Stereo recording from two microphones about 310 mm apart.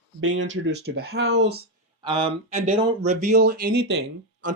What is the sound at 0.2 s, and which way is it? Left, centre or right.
Speech, right.